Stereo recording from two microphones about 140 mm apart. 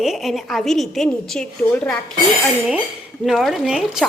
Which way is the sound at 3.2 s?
Centre (ahead or behind).